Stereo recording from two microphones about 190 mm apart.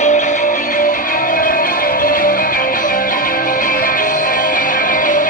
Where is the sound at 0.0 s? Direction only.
40° left (ahead or behind).